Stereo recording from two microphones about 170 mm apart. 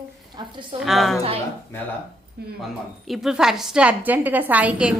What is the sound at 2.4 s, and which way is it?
Speech, 75° right (ahead or behind).